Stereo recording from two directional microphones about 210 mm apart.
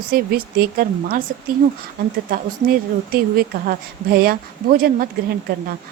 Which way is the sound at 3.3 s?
45° right (ahead or behind).